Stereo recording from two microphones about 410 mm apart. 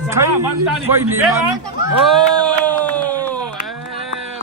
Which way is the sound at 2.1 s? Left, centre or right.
Centre.